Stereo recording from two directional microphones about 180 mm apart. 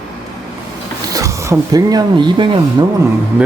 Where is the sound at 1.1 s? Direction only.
20° right (ahead or behind).